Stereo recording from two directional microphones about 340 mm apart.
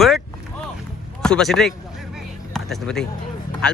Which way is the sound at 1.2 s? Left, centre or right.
Centre.